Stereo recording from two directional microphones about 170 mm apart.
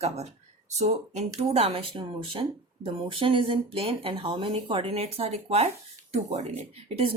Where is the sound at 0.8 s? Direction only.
40° right (ahead or behind).